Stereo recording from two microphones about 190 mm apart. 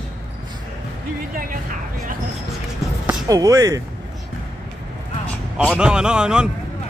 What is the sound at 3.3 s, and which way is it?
Speech, 15° right (ahead or behind).